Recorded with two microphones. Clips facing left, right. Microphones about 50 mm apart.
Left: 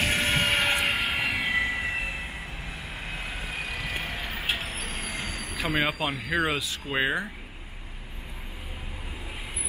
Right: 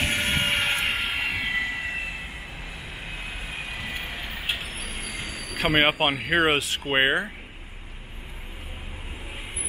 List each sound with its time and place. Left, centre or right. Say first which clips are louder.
0.0 s music: even; centre
0.7 s vehicle: even; centre
5.8 s speech: right 6 dB; right